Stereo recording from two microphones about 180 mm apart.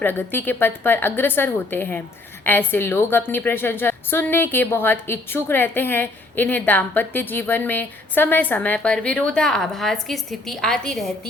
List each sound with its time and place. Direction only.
0.0 s a woman's voice: 10° left (ahead or behind)